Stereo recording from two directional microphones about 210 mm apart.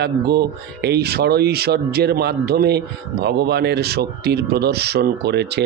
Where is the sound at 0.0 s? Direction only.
50° right (ahead or behind).